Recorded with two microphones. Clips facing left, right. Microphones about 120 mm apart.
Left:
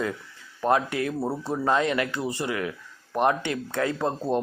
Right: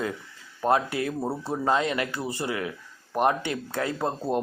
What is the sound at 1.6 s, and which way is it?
Speech, 25° right (ahead or behind).